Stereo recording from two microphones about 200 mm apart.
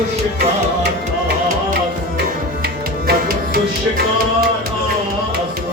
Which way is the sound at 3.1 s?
50° right (ahead or behind).